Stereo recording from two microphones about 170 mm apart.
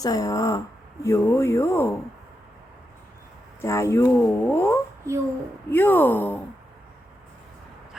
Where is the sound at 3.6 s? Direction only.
15° left (ahead or behind).